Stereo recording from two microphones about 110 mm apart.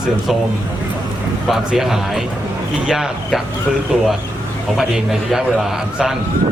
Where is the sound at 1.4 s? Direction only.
5° right (ahead or behind).